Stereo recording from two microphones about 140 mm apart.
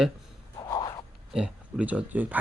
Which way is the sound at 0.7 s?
30° left (ahead or behind).